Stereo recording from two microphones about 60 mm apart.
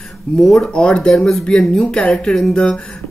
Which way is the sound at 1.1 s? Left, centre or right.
Centre.